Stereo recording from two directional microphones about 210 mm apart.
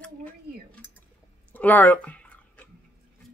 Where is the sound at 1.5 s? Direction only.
10° left (ahead or behind).